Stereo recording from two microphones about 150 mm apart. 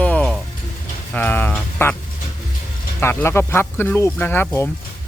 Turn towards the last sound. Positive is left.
turn(degrees=15)  # may be behind; listen again after turning